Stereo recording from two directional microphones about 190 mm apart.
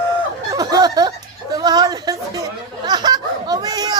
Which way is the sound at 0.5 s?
20° right (ahead or behind).